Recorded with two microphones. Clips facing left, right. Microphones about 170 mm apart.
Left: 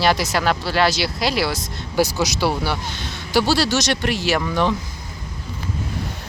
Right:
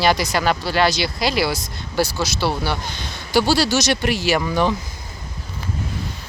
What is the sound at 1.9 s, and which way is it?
Speech, 15° left (ahead or behind).